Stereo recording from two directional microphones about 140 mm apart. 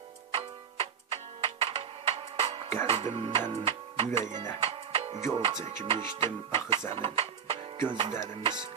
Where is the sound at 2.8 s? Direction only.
45° right (ahead or behind).